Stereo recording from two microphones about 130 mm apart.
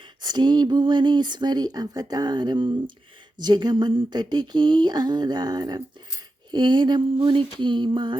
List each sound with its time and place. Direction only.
0.2 s speech: 35° right (ahead or behind)